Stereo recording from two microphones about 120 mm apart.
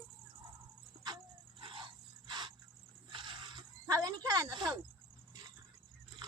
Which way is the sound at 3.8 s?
30° right (ahead or behind).